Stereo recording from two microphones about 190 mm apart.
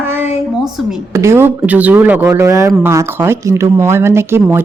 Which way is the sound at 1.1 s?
15° right (ahead or behind).